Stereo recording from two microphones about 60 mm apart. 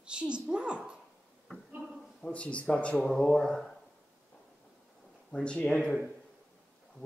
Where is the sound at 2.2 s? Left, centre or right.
Left.